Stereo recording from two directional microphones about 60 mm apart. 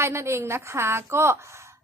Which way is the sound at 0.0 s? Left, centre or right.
Right.